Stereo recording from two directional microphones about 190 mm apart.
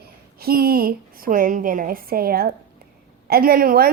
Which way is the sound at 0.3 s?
50° right (ahead or behind).